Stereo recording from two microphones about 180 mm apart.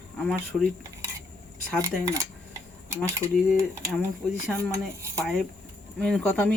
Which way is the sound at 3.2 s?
15° right (ahead or behind).